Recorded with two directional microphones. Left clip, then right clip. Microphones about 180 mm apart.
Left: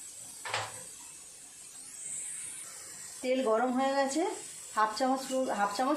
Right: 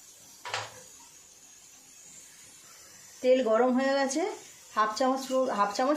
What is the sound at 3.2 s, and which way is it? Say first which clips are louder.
Speech: right 5 dB; 60° right (ahead or behind).